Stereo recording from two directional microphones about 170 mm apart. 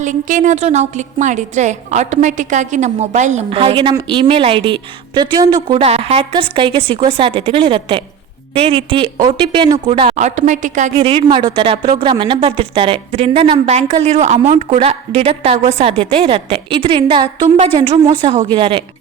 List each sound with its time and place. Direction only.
0.0 s a woman's voice: 50° right (ahead or behind); by 5.7 s 25° right (ahead or behind)
5.7 s speech: 35° right (ahead or behind)
10.2 s a woman's voice: 45° right (ahead or behind)
10.9 s speech: 30° right (ahead or behind)